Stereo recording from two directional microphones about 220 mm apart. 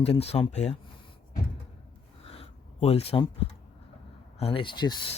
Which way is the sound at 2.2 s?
25° left (ahead or behind).